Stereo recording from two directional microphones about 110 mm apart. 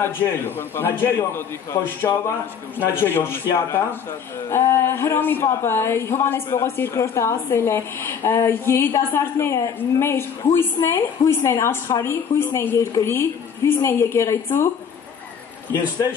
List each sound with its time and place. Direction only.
0.6 s speech: 20° left (ahead or behind)